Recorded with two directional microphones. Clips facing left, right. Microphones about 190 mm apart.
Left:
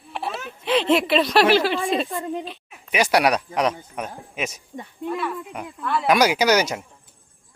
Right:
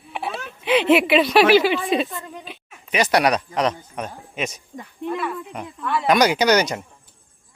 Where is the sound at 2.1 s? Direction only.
25° left (ahead or behind).